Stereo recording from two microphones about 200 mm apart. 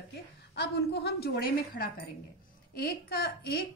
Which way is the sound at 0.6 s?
55° left (ahead or behind).